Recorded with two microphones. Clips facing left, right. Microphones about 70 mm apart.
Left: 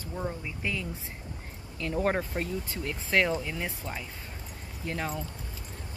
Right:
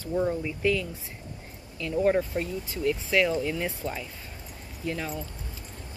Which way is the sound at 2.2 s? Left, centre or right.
Left.